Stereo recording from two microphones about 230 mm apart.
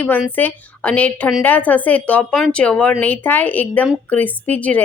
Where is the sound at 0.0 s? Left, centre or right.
Centre.